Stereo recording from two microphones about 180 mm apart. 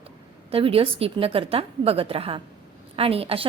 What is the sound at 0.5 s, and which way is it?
A woman's voice, 30° right (ahead or behind).